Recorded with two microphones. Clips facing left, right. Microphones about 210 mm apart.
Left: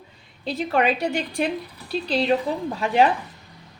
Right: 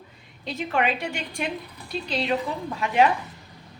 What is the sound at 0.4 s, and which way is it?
A woman's voice, 35° left (ahead or behind).